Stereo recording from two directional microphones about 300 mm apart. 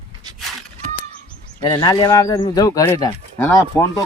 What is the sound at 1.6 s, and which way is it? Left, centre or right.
Speech, centre.